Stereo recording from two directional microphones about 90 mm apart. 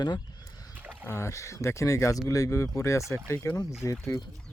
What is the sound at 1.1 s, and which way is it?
Speech, 35° left (ahead or behind).